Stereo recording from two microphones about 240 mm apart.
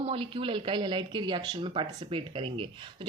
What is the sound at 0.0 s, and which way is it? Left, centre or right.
Speech, right.